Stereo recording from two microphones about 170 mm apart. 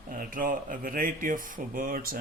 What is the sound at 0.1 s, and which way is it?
Speech, 55° right (ahead or behind).